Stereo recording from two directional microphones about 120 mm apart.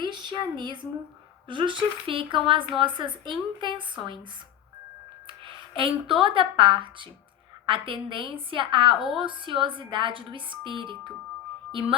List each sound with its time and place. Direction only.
0.0 s a sound: 40° right (ahead or behind)
1.5 s speech: 40° right (ahead or behind)
5.7 s speech: 45° right (ahead or behind)
11.7 s music: 50° right (ahead or behind)